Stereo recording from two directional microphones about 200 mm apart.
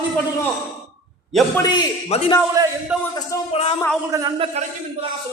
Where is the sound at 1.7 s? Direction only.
20° left (ahead or behind).